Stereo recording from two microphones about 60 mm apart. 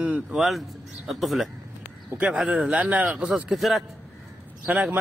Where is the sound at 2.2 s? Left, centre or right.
Centre.